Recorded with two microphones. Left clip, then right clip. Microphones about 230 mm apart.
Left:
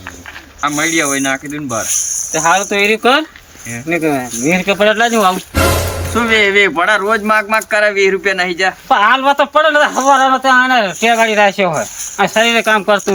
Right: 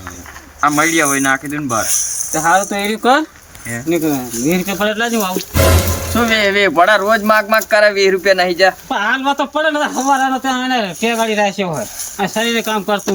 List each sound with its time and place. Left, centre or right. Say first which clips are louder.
0.6 s speech: right 2 dB; centre
2.3 s speech: left 1 dB; centre
6.1 s speech: left 3 dB; centre
8.9 s speech: left 6 dB; centre